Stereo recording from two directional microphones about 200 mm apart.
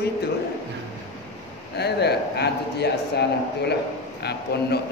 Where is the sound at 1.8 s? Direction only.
55° left (ahead or behind).